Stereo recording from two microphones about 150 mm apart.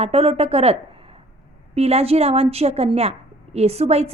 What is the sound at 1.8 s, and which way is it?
A woman's voice, 45° right (ahead or behind).